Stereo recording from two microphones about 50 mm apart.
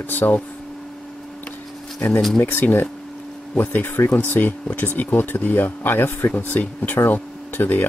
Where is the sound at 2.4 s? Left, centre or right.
Left.